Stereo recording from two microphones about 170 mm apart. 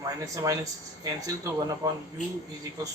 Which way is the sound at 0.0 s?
20° right (ahead or behind).